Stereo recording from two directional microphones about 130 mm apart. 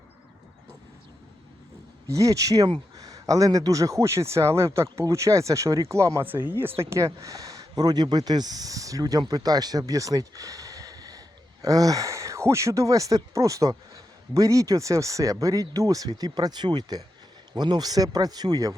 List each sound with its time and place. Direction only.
2.0 s speech: 25° right (ahead or behind)